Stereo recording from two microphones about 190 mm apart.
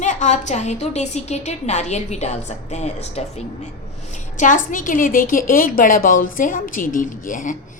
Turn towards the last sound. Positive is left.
turn(degrees=45)  # may be behind; listen again after turning